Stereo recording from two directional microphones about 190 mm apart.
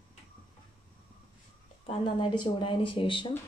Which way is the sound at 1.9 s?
25° left (ahead or behind).